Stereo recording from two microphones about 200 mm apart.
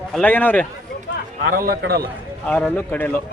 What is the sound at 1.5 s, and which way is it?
Speech, 50° right (ahead or behind).